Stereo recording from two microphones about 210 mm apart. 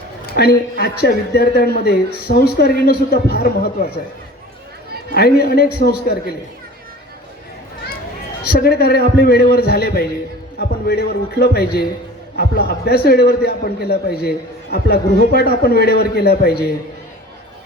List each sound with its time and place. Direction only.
0.3 s a man's voice: 45° left (ahead or behind)
5.1 s a man's voice: 45° left (ahead or behind)
8.4 s a man's voice: 50° left (ahead or behind)